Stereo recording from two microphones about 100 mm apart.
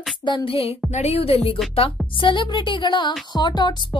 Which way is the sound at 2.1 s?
55° left (ahead or behind).